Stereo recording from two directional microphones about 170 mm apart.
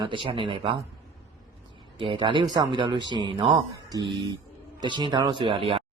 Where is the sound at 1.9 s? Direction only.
30° right (ahead or behind).